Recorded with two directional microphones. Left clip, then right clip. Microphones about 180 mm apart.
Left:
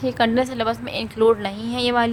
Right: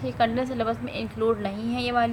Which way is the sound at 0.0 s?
45° left (ahead or behind).